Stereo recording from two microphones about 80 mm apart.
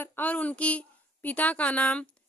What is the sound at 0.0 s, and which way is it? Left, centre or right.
A woman's voice, centre.